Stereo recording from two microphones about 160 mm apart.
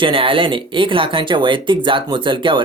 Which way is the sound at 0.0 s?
35° right (ahead or behind).